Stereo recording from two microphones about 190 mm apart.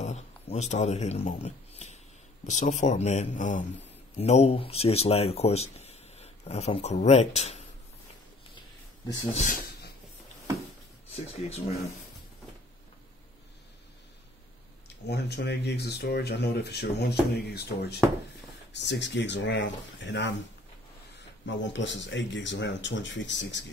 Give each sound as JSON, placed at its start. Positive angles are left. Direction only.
{"t": 0.0, "sound": "speech", "side_deg": 35}
{"t": 9.3, "sound": "speech", "side_deg": 40}
{"t": 11.3, "sound": "speech", "side_deg": 35}
{"t": 15.0, "sound": "speech", "side_deg": 60}
{"t": 21.5, "sound": "speech", "side_deg": 70}